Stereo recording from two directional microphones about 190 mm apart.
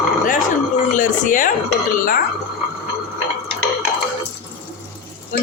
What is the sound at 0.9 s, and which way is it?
Speech, 45° left (ahead or behind).